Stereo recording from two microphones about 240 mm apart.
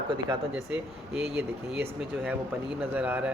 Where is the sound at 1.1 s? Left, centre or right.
Centre.